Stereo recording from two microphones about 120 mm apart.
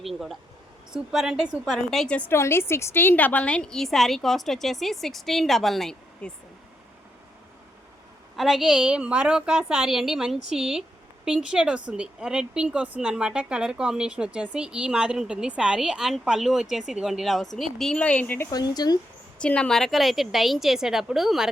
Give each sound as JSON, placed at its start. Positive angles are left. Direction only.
{"t": 0.0, "sound": "a woman's voice", "side_deg": 0}
{"t": 2.1, "sound": "a woman's voice", "side_deg": 20}
{"t": 8.4, "sound": "a woman's voice", "side_deg": 0}
{"t": 18.5, "sound": "speech", "side_deg": 35}
{"t": 19.4, "sound": "a woman's voice", "side_deg": 10}